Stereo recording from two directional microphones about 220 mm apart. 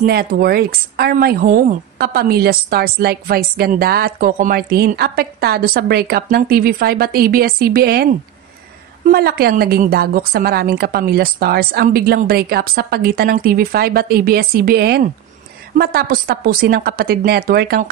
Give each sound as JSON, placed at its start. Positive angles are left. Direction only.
{"t": 0.0, "sound": "a woman's voice", "side_deg": -45}